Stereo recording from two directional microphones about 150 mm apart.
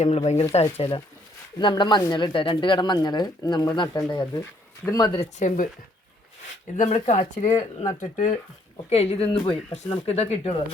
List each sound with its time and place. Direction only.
0.5 s speech: 40° left (ahead or behind); by 5.2 s 25° left (ahead or behind)
5.4 s speech: 55° left (ahead or behind)
6.7 s speech: 55° left (ahead or behind)
7.9 s speech: 60° left (ahead or behind)
8.9 s speech: 45° left (ahead or behind)